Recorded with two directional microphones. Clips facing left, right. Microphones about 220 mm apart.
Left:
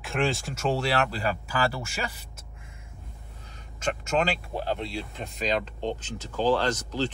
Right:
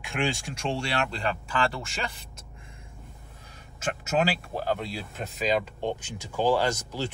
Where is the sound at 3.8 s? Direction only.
5° right (ahead or behind).